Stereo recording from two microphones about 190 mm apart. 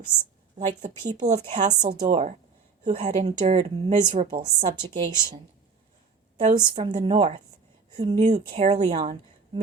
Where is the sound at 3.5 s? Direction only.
20° right (ahead or behind).